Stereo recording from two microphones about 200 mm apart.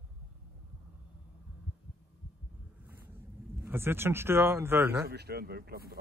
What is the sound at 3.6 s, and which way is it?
Speech, 10° right (ahead or behind).